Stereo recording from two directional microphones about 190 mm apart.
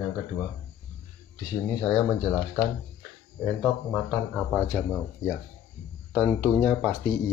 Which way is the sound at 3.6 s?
5° left (ahead or behind).